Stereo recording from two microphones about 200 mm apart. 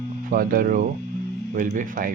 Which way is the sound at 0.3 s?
45° right (ahead or behind).